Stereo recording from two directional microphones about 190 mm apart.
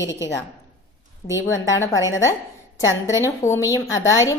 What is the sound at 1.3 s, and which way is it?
A woman's voice, 15° left (ahead or behind).